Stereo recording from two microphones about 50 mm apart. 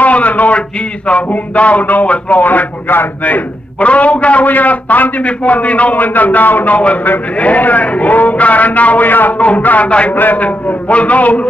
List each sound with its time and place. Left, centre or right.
0.0 s a sound: left
1.0 s a man's voice: left
3.8 s a man's voice: left